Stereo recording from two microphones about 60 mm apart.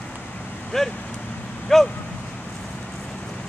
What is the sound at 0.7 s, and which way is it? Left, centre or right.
Speech, centre.